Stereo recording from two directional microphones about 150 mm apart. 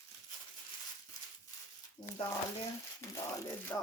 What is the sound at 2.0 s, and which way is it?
Speech, 35° left (ahead or behind).